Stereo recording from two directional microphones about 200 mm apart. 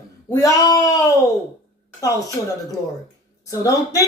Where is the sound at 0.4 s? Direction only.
15° left (ahead or behind).